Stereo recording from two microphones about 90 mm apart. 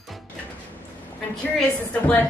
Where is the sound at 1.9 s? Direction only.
20° left (ahead or behind).